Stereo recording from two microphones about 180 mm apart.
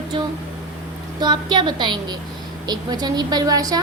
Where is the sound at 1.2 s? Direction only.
25° right (ahead or behind).